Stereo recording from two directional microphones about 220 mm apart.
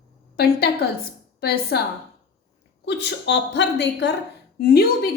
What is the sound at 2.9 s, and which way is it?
A woman's voice, 50° left (ahead or behind).